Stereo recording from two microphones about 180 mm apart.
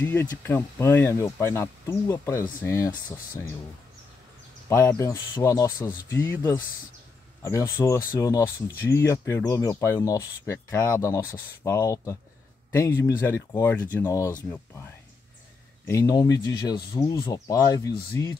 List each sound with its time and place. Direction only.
0.0 s speech: 10° left (ahead or behind)
4.6 s speech: 20° left (ahead or behind)
15.9 s speech: 20° left (ahead or behind)